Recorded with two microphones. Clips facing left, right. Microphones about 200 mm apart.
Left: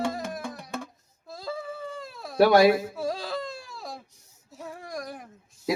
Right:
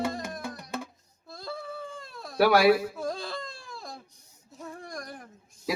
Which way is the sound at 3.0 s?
5° left (ahead or behind).